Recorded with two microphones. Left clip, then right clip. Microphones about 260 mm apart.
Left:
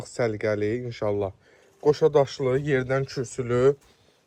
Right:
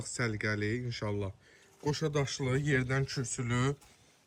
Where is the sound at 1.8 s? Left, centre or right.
Centre.